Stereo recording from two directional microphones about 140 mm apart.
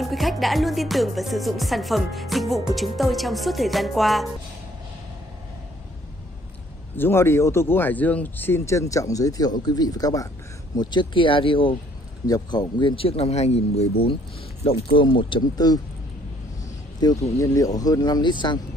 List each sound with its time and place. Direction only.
0.0 s music: centre (ahead or behind)
7.0 s speech: 15° left (ahead or behind); by 13.8 s 50° left (ahead or behind)
15.0 s speech: 35° left (ahead or behind)
17.0 s speech: 30° left (ahead or behind)